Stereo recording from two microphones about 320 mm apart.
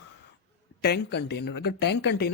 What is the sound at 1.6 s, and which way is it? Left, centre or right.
Speech, left.